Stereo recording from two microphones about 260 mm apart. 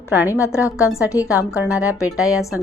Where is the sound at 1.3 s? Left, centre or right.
Centre.